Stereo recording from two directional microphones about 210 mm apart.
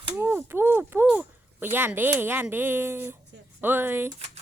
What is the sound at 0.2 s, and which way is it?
Speech, 10° right (ahead or behind).